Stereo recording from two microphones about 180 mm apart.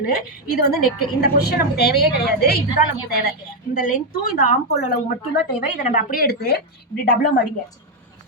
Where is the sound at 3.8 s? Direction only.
50° left (ahead or behind).